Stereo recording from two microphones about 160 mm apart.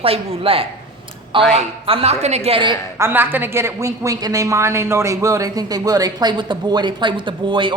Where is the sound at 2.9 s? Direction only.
15° right (ahead or behind); by 7.7 s 30° right (ahead or behind).